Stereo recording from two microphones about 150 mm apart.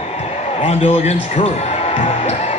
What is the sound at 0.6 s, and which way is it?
Speech, 45° left (ahead or behind).